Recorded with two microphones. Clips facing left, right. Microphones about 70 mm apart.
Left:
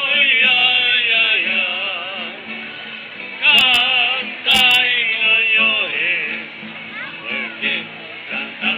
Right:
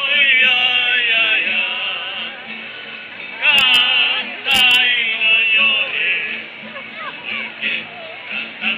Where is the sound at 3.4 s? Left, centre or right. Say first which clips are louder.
Even; centre.